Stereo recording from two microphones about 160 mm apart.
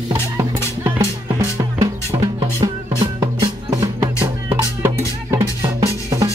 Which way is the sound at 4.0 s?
15° right (ahead or behind).